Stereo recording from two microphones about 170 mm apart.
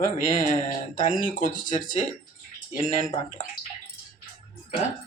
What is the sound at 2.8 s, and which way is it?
Speech, 45° left (ahead or behind).